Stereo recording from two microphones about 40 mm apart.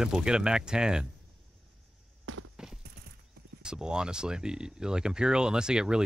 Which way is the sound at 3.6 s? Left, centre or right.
Centre.